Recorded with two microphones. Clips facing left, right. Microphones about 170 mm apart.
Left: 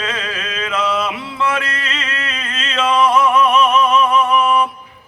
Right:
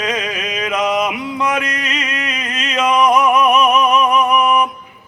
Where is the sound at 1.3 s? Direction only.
15° right (ahead or behind).